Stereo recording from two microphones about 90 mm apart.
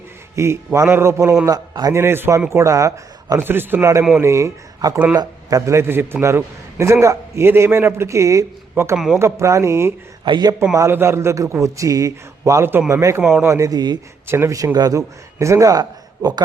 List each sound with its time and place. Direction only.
0.3 s a man's voice: 30° right (ahead or behind)
1.5 s speech: 45° right (ahead or behind)
1.9 s a man's voice: 30° right (ahead or behind)
3.4 s a man's voice: 25° right (ahead or behind)
10.2 s speech: 55° right (ahead or behind)
10.8 s a man's voice: 30° right (ahead or behind); by 14.0 s 50° right (ahead or behind)
14.3 s a man's voice: 30° right (ahead or behind); by 16.4 s 50° right (ahead or behind)